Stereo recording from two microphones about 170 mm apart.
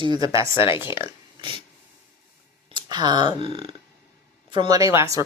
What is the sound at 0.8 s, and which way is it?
Speech, 30° left (ahead or behind).